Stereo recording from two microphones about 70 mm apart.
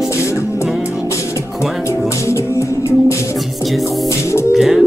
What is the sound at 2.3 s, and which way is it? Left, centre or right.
Music, left.